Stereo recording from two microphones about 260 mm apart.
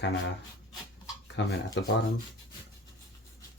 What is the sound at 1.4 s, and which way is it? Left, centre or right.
Speech, left.